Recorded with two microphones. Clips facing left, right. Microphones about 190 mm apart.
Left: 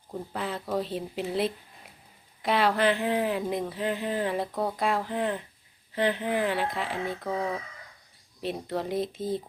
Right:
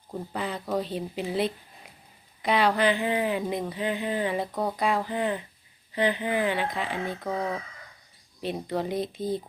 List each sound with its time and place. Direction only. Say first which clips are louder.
0.1 s speech: right 1 dB; centre (ahead or behind)